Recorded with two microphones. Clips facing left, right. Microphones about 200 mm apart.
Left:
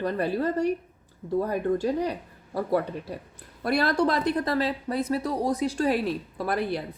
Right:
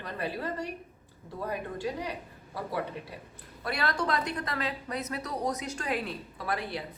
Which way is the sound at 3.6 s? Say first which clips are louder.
Left 8 dB; 40° left (ahead or behind).